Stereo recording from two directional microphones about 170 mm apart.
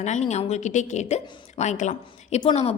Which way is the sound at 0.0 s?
45° left (ahead or behind).